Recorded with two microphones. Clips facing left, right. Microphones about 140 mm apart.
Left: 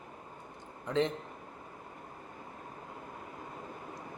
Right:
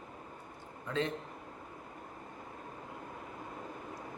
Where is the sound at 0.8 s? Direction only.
20° left (ahead or behind).